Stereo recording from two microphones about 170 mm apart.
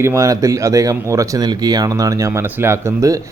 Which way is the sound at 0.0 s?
15° right (ahead or behind).